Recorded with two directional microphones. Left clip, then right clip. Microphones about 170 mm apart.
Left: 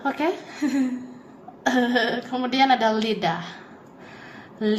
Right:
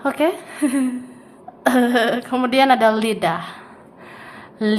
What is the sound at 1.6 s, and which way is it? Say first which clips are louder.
A woman's voice: right 5 dB; 30° right (ahead or behind).